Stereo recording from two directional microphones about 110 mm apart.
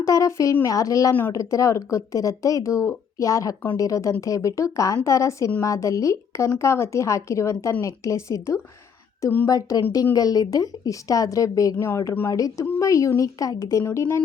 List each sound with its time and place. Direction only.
0.0 s a woman's voice: 30° left (ahead or behind)
9.5 s a woman's voice: 35° left (ahead or behind)